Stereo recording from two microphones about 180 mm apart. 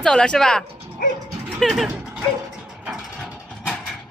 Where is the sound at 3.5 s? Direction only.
5° left (ahead or behind).